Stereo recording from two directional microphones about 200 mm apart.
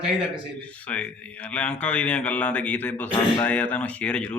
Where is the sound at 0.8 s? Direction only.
5° left (ahead or behind).